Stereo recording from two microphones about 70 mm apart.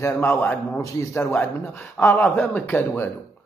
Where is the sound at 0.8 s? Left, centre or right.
Left.